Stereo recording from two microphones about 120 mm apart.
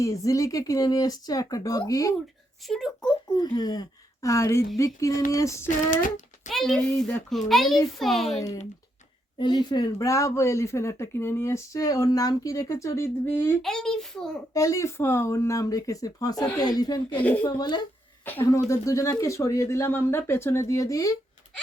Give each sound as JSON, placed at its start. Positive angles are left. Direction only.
{"t": 0.0, "sound": "speech", "side_deg": 25}
{"t": 2.6, "sound": "speech", "side_deg": 5}
{"t": 3.3, "sound": "speech", "side_deg": 35}
{"t": 5.6, "sound": "a child's voice", "side_deg": 90}
{"t": 6.5, "sound": "a child's voice", "side_deg": 0}
{"t": 9.4, "sound": "speech", "side_deg": 35}
{"t": 13.6, "sound": "a child's voice", "side_deg": 5}
{"t": 14.5, "sound": "a woman's voice", "side_deg": 25}
{"t": 18.4, "sound": "speech", "side_deg": 25}